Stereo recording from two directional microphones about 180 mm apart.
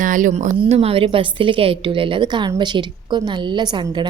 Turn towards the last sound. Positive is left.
turn(degrees=-25)  # may be behind; listen again after turning